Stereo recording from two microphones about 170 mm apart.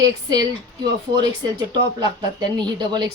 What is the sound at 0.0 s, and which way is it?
Speech, 20° right (ahead or behind).